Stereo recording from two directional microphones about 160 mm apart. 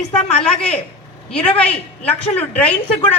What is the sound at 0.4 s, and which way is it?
A woman's voice, 5° left (ahead or behind).